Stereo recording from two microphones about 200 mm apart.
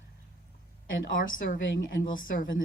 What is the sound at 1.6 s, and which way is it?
Speech, 70° left (ahead or behind).